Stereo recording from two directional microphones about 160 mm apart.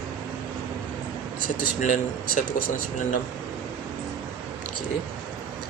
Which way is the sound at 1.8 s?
55° left (ahead or behind).